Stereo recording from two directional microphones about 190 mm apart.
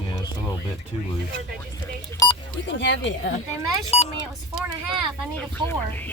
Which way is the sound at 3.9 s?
35° left (ahead or behind).